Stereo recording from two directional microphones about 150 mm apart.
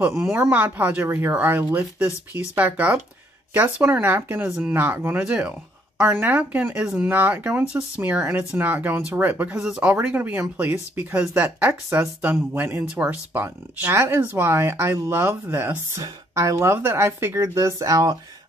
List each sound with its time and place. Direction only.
0.0 s speech: 15° right (ahead or behind)